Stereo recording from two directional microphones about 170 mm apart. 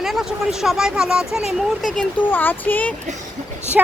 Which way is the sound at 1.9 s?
10° left (ahead or behind).